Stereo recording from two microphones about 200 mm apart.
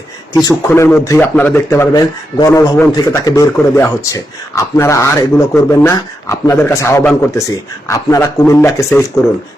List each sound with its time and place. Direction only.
0.4 s speech: 10° left (ahead or behind)